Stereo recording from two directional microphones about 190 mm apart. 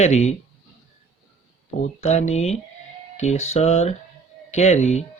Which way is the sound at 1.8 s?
35° left (ahead or behind).